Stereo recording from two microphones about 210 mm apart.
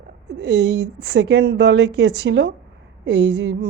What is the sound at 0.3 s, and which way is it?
Speech, 55° right (ahead or behind).